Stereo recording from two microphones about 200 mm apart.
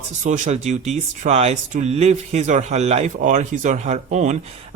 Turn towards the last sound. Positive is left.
turn(degrees=-35)  # may be behind; listen again after turning